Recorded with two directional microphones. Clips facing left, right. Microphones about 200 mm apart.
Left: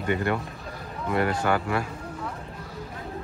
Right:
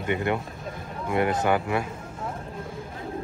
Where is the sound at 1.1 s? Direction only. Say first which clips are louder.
Right 1 dB; 20° right (ahead or behind).